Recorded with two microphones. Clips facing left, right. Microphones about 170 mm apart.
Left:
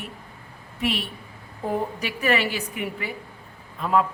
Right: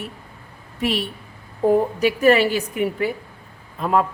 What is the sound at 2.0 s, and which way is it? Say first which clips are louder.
A woman's voice: right 9 dB; 40° right (ahead or behind).